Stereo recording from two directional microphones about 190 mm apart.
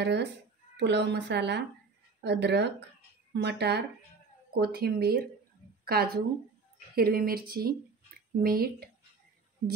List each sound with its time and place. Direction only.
0.0 s speech: 65° right (ahead or behind)